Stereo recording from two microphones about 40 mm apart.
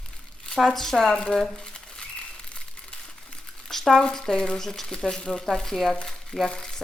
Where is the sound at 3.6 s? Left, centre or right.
Centre.